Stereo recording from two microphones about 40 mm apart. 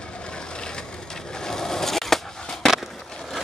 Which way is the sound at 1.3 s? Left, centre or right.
Centre.